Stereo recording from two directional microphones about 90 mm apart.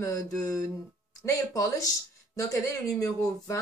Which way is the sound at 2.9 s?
35° left (ahead or behind).